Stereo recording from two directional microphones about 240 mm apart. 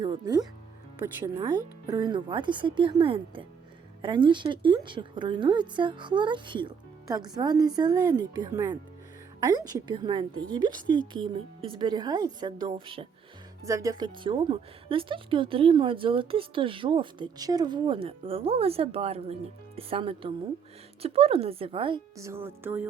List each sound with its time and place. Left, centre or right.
0.0 s speech: centre
1.9 s speech: centre